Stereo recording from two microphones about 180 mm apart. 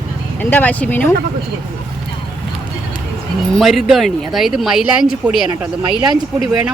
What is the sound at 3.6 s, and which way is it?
Speech, centre (ahead or behind).